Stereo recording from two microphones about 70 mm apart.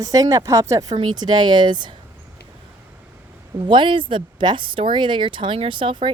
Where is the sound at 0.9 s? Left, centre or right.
Right.